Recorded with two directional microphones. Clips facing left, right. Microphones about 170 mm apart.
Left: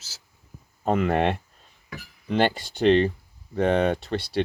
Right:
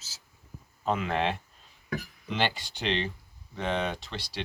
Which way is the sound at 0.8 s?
55° left (ahead or behind).